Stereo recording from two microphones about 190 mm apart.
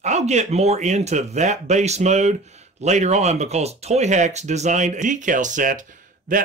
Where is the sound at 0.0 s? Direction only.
35° right (ahead or behind).